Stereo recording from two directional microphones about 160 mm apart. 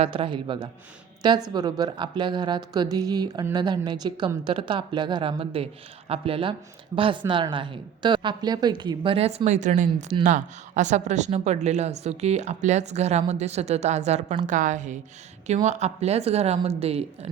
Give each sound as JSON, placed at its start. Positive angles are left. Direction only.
{"t": 0.0, "sound": "a woman's voice", "side_deg": -35}